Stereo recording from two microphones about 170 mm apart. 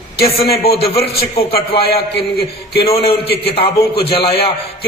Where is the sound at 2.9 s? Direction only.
35° left (ahead or behind).